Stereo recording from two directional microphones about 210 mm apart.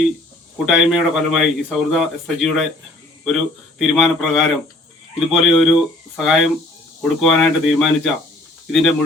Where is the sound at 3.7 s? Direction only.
Centre (ahead or behind).